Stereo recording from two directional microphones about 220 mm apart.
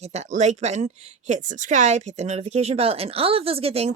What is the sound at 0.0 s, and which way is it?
Speech, 30° right (ahead or behind).